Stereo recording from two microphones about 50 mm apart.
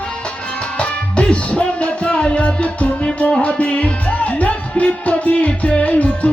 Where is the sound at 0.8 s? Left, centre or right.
Left.